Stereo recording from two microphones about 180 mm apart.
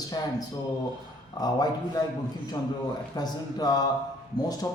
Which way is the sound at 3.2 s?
20° left (ahead or behind).